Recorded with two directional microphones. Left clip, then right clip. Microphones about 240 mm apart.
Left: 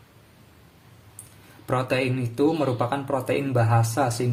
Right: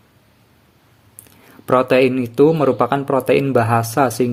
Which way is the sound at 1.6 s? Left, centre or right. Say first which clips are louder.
Right 11 dB; right.